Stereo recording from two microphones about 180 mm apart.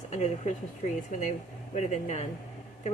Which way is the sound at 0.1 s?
40° left (ahead or behind).